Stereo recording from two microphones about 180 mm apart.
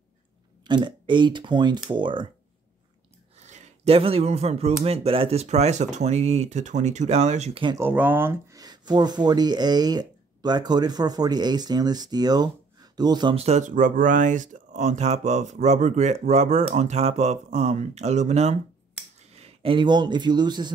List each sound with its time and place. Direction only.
0.7 s speech: 25° right (ahead or behind)
3.4 s speech: 35° right (ahead or behind)
7.7 s speech: 10° right (ahead or behind)